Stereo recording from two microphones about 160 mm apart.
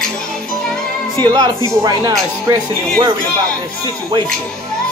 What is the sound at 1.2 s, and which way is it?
Speech, 30° right (ahead or behind).